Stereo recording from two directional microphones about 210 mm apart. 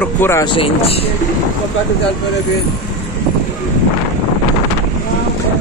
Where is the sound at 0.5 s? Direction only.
25° left (ahead or behind).